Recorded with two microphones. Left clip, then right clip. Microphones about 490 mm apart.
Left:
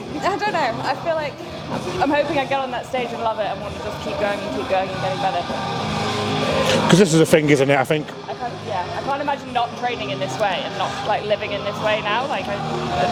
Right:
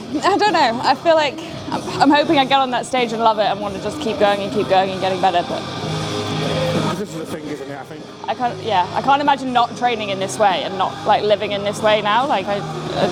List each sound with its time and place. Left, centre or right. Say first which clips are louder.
0.2 s speech: right 6 dB; right
7.0 s speech: left 13 dB; left
8.7 s speech: right 8 dB; right